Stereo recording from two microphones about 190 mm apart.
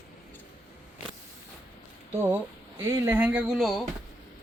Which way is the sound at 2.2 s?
10° right (ahead or behind).